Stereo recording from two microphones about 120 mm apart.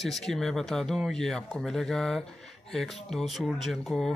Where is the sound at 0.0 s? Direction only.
Centre (ahead or behind).